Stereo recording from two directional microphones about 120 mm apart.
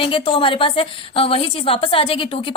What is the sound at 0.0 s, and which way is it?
A woman's voice, 45° left (ahead or behind).